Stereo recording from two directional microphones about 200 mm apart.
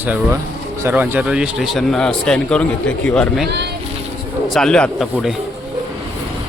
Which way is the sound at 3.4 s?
55° right (ahead or behind).